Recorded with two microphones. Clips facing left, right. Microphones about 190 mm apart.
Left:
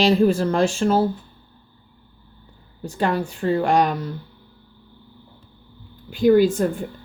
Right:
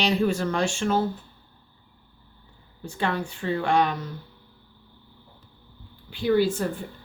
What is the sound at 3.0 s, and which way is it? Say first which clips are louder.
Speech: left 6 dB; 40° left (ahead or behind).